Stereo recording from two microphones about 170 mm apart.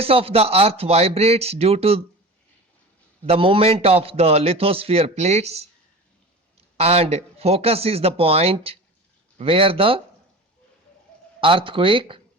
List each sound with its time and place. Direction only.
0.0 s a man's voice: 35° right (ahead or behind)
3.2 s a man's voice: 30° right (ahead or behind)
6.7 s a man's voice: 35° right (ahead or behind)
11.3 s a man's voice: 30° right (ahead or behind)